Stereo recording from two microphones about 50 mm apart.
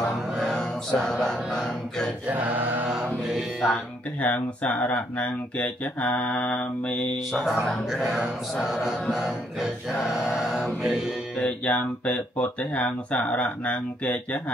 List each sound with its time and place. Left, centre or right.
0.5 s music: centre
2.2 s choir: right
2.9 s music: centre
3.7 s speech: left
7.4 s speech: centre
11.4 s speech: left